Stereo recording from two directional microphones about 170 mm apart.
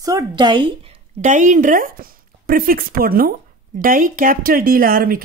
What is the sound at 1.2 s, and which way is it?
Speech, 45° right (ahead or behind).